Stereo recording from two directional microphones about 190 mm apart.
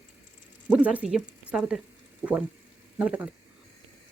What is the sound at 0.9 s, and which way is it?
Speech, 5° right (ahead or behind).